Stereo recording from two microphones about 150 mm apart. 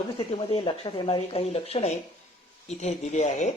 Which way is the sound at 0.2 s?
35° left (ahead or behind).